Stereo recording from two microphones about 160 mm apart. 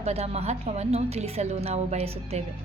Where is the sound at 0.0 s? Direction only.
40° right (ahead or behind).